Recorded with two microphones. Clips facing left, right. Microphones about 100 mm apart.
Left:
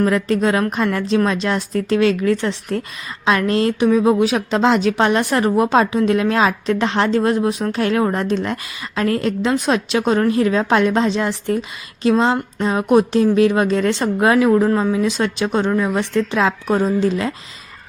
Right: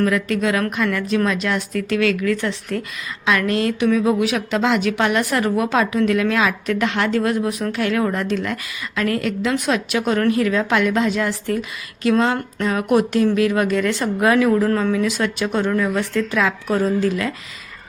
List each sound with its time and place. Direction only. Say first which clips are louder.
0.0 s a woman's voice: left 2 dB; 30° left (ahead or behind)